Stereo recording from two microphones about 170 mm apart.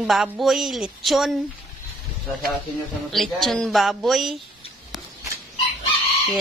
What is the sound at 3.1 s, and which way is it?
A woman's voice, centre (ahead or behind).